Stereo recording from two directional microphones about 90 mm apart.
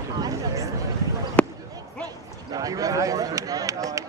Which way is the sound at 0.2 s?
40° right (ahead or behind).